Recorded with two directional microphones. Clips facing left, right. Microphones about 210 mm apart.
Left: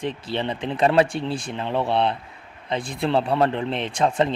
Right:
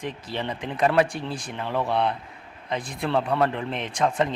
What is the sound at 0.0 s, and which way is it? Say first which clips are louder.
Speech: left 4 dB; 30° left (ahead or behind).